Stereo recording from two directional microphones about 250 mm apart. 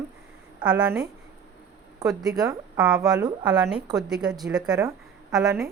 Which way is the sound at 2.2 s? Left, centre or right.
Centre.